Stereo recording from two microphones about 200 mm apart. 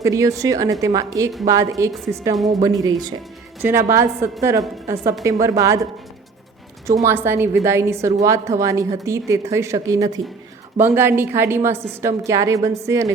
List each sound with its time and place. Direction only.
0.0 s a woman's voice: 15° right (ahead or behind)
6.8 s a woman's voice: 15° right (ahead or behind)